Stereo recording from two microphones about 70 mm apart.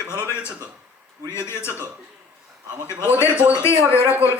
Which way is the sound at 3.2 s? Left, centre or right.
Right.